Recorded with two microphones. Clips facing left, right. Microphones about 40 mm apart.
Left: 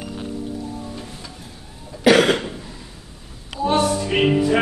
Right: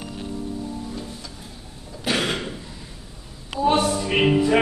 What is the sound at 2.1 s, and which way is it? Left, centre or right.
Cough, left.